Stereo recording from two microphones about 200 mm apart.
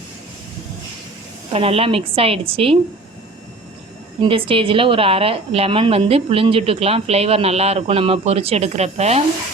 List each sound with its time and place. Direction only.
1.5 s a woman's voice: 30° right (ahead or behind)
4.2 s a woman's voice: 25° right (ahead or behind)